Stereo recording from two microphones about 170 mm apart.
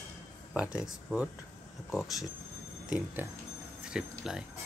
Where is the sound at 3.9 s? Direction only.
5° right (ahead or behind).